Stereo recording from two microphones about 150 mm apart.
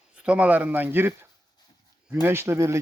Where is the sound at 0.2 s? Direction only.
10° right (ahead or behind).